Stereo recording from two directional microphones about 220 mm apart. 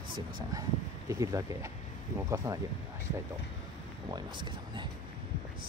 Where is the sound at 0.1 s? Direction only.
15° right (ahead or behind).